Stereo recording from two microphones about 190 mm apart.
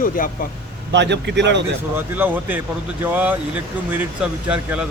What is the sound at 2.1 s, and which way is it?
A man's voice, 10° right (ahead or behind).